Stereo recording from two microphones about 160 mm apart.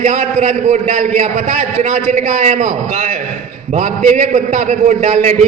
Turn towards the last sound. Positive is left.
turn(degrees=-50)  # may be behind; listen again after turning